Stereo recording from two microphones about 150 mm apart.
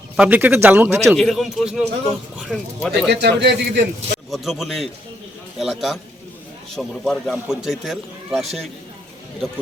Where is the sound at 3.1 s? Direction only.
90° right.